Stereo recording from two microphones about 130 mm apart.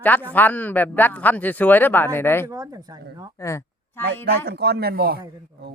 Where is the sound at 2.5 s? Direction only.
30° right (ahead or behind).